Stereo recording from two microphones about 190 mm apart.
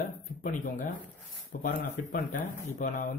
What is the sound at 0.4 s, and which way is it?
Speech, 45° left (ahead or behind).